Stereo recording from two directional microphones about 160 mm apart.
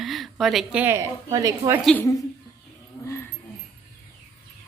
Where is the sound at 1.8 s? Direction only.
10° left (ahead or behind).